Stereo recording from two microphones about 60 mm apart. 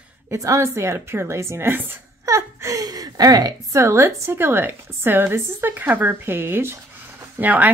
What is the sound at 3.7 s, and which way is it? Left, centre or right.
A woman's voice, right.